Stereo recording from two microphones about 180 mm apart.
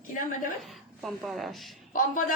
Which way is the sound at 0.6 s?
Centre (ahead or behind).